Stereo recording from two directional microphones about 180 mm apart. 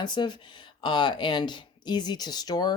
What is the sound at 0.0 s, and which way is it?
Speech, 25° left (ahead or behind).